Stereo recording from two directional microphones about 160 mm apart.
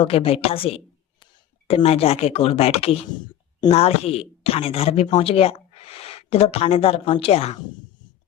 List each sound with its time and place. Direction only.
0.0 s speech: 35° left (ahead or behind)